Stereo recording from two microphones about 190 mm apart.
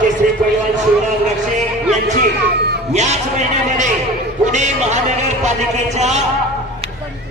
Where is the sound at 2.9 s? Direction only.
35° right (ahead or behind).